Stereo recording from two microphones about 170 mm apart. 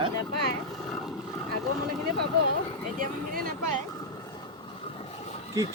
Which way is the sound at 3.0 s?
50° right (ahead or behind).